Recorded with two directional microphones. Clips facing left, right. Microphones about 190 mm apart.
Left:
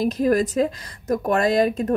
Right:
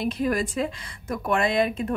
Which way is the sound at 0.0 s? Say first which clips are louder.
Left 6 dB; 40° left (ahead or behind).